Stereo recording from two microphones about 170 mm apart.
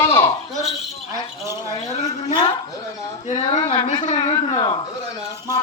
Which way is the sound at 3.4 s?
30° left (ahead or behind).